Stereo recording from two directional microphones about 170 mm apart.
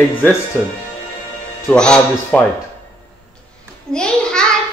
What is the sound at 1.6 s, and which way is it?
Speech, 5° left (ahead or behind).